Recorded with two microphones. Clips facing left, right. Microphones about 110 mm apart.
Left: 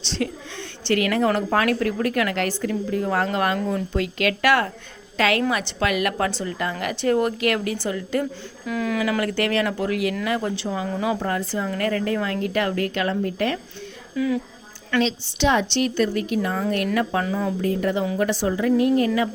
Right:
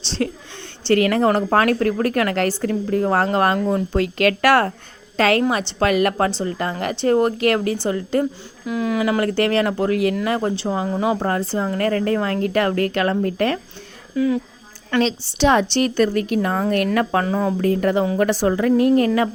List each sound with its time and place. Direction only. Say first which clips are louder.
0.0 s speech: right 3 dB; 35° right (ahead or behind)
8.6 s speech: right 3 dB; 20° right (ahead or behind); by 13.6 s 50° right (ahead or behind)
14.2 s a woman's voice: right 4 dB; 35° right (ahead or behind); by 19.3 s 50° right (ahead or behind)